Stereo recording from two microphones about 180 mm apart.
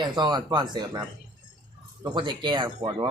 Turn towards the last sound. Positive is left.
turn(degrees=-25)  # may be behind; listen again after turning